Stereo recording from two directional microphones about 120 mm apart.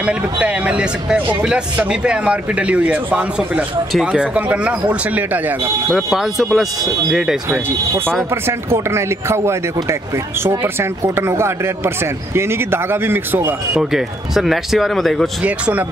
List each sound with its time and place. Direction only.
0.0 s speech: 10° right (ahead or behind)
8.5 s speech: 20° right (ahead or behind)
13.7 s speech: 5° right (ahead or behind)
15.4 s speech: 10° right (ahead or behind)